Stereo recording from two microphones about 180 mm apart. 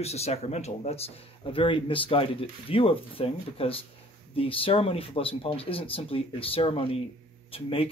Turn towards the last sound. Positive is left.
turn(degrees=30)  # may be behind; listen again after turning